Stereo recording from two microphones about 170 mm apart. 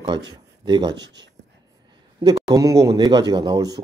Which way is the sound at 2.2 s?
20° right (ahead or behind).